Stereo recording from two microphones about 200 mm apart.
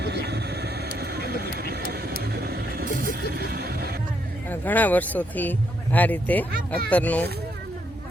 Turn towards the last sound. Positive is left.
turn(degrees=10)  # may be behind; listen again after turning